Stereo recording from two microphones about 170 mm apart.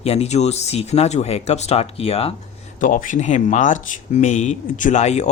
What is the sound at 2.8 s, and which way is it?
Speech, 50° left (ahead or behind).